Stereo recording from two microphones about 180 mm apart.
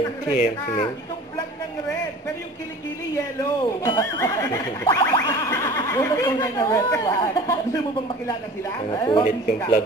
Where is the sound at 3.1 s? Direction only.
15° left (ahead or behind).